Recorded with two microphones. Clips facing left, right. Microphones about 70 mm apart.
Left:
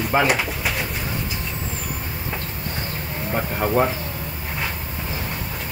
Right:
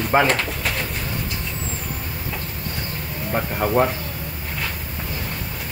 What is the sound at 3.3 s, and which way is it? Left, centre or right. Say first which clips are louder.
Moo: right 1 dB; centre.